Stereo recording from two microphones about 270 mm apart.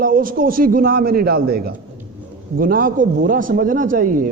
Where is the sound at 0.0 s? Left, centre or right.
Right.